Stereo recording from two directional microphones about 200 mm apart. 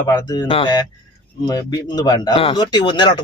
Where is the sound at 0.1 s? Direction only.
20° left (ahead or behind).